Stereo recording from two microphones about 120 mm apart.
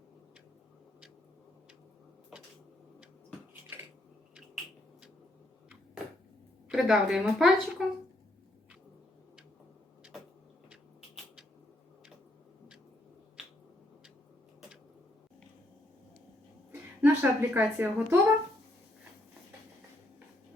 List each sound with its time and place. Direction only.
6.7 s speech: centre (ahead or behind)
17.0 s a woman's voice: 15° right (ahead or behind)